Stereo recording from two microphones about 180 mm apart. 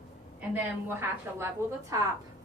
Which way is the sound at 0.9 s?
15° right (ahead or behind).